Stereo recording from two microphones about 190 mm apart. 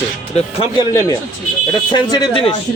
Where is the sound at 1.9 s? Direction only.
20° left (ahead or behind).